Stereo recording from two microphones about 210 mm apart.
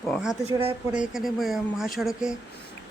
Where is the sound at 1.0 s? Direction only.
Centre (ahead or behind).